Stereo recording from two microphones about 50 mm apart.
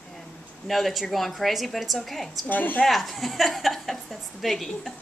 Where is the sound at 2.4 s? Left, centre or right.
Left.